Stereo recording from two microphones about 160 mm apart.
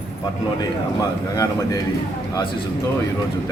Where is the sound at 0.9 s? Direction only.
20° left (ahead or behind).